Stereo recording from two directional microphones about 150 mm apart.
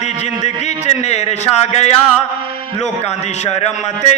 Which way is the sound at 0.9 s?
45° left (ahead or behind).